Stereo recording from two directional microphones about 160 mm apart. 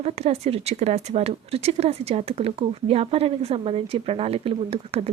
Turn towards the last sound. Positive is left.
turn(degrees=-35)  # may be behind; listen again after turning